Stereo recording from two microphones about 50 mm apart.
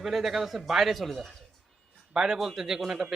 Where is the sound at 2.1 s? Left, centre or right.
Centre.